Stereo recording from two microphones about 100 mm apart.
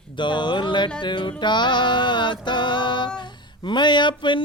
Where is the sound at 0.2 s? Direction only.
50° left (ahead or behind).